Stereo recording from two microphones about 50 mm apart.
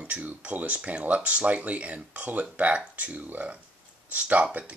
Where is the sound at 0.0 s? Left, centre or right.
Right.